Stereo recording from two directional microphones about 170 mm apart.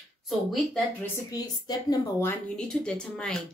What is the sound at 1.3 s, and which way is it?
Speech, 25° left (ahead or behind).